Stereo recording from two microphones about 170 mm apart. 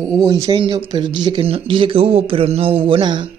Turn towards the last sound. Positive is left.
turn(degrees=-30)  # may be behind; listen again after turning